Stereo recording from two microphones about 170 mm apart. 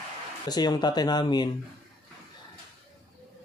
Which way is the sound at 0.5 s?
25° left (ahead or behind).